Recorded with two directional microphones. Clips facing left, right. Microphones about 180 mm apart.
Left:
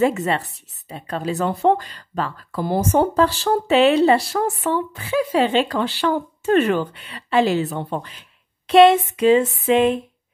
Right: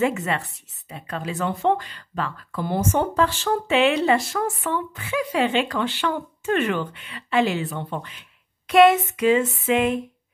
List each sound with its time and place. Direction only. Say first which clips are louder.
0.0 s speech: left 4 dB; 35° left (ahead or behind)